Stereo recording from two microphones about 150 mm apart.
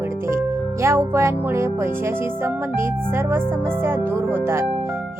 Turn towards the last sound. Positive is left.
turn(degrees=-15)  # may be behind; listen again after turning